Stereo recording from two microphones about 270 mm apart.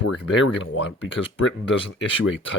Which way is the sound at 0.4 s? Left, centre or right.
Left.